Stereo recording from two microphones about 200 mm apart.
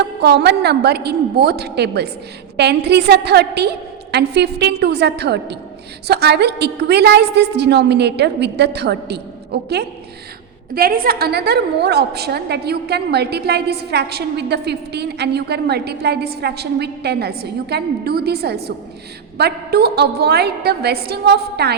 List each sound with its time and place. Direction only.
0.0 s a woman's voice: 55° right (ahead or behind)